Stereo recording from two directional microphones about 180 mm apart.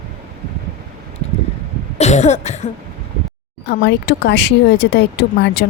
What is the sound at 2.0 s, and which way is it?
Cough, 40° left (ahead or behind).